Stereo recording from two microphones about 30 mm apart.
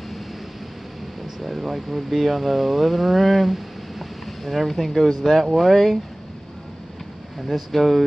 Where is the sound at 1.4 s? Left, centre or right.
Centre.